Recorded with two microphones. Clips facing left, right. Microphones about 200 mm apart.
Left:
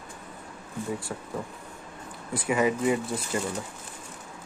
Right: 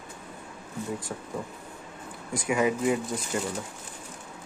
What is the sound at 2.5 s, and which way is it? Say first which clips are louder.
Speech: left 1 dB; centre (ahead or behind).